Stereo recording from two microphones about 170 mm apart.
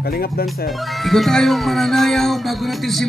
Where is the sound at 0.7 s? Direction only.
Centre (ahead or behind).